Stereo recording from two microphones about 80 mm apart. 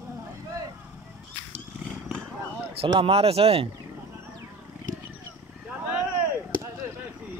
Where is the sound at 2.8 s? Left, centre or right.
Right.